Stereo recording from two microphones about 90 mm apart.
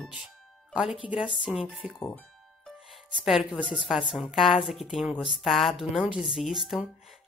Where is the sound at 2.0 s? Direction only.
15° left (ahead or behind).